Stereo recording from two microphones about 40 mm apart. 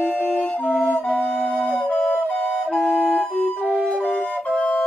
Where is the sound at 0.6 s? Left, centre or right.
Left.